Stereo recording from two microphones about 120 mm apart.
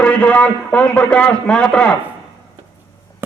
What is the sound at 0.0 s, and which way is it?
A man's voice, 10° left (ahead or behind).